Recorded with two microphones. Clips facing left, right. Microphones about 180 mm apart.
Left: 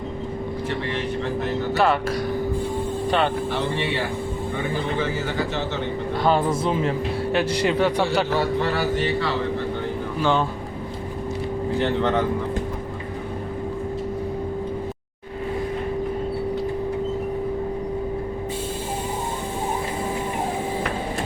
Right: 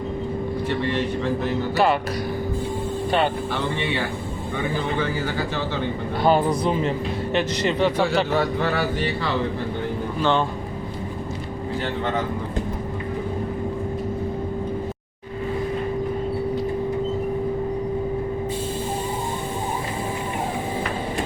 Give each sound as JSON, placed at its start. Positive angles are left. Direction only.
{"t": 1.7, "sound": "a man's voice", "side_deg": 0}
{"t": 6.2, "sound": "a man's voice", "side_deg": 0}